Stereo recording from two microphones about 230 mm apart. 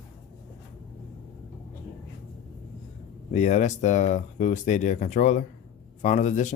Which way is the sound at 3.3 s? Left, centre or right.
Left.